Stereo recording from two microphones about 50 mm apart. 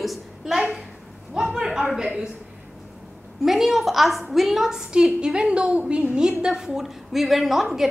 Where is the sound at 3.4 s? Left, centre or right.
Centre.